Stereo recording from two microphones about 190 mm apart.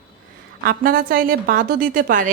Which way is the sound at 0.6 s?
50° right (ahead or behind).